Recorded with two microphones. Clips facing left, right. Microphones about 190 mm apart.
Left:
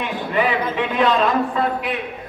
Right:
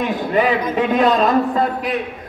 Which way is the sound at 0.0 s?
40° right (ahead or behind).